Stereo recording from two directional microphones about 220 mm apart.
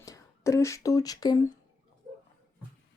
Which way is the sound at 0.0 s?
15° left (ahead or behind).